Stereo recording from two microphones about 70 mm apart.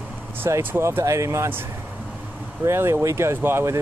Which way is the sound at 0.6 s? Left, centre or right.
Right.